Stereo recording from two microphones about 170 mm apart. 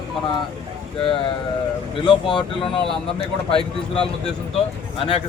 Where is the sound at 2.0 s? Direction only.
30° left (ahead or behind).